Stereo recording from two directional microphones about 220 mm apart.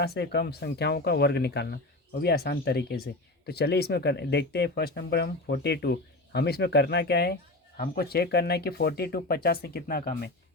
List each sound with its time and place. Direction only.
0.0 s speech: 45° left (ahead or behind)